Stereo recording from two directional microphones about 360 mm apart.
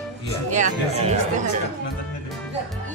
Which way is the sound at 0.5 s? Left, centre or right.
Centre.